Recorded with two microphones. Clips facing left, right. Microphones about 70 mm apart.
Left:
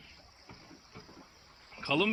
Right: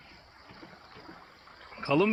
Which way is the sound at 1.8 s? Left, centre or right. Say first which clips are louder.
Right 5 dB; right.